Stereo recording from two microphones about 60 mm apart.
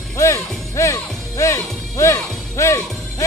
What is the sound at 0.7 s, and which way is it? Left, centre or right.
Music, left.